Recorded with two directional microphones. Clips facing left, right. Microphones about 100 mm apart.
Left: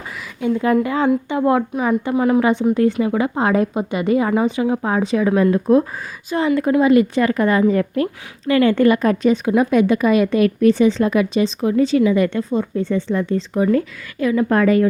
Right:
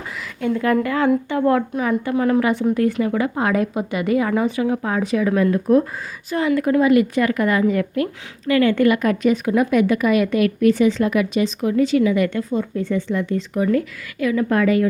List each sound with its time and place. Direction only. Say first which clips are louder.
0.4 s a woman's voice: left 2 dB; 20° left (ahead or behind); by 14.8 s 40° left (ahead or behind)